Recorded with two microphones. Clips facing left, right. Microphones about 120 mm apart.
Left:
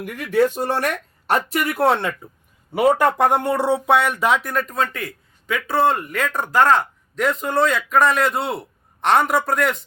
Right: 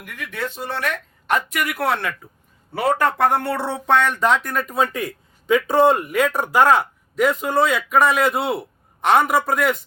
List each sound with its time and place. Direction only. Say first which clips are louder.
0.0 s speech: left 11 dB; 35° left (ahead or behind)
1.5 s a man's voice: left 4 dB; 30° left (ahead or behind)
2.7 s speech: left 3 dB; 15° left (ahead or behind); by 9.7 s 5° right (ahead or behind)